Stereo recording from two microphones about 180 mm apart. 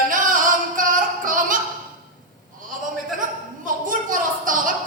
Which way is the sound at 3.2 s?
50° right (ahead or behind).